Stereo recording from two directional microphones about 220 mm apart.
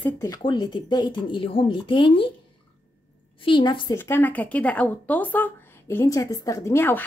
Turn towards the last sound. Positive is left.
turn(degrees=10)  # may be behind; listen again after turning